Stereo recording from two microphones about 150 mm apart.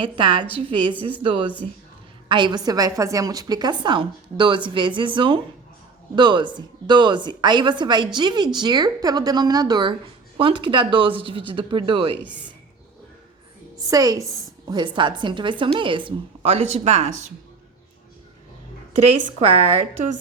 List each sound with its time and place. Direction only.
0.0 s a woman's voice: 35° right (ahead or behind)
12.2 s speech: 10° right (ahead or behind)
13.9 s a woman's voice: 25° right (ahead or behind); by 17.2 s 50° right (ahead or behind)
19.4 s a woman's voice: 45° right (ahead or behind)